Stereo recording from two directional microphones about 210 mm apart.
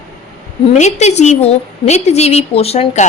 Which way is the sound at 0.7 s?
35° left (ahead or behind).